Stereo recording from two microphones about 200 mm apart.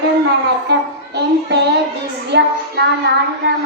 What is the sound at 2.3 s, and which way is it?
Child singing, 60° right (ahead or behind).